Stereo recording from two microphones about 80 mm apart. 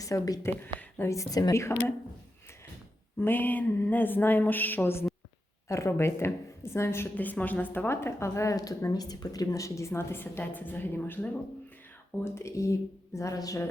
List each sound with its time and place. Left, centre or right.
0.0 s speech: left
0.8 s a sound: left
1.1 s speech: left
3.2 s a woman's voice: left
5.6 s speech: left
7.2 s speech: left
12.2 s speech: left